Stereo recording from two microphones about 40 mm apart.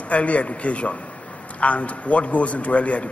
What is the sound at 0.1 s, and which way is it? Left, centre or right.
A man's voice, left.